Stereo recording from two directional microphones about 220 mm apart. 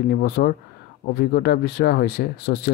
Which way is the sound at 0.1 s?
45° left (ahead or behind).